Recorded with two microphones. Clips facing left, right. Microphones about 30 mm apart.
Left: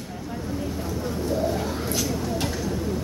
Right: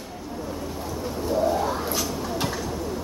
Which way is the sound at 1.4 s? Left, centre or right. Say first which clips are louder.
Right 3 dB; centre.